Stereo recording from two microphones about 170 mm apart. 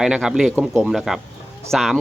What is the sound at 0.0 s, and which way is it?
A man's voice, 5° right (ahead or behind).